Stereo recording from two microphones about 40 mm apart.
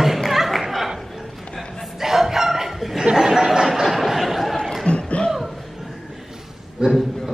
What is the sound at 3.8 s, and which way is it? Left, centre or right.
Chatter, centre.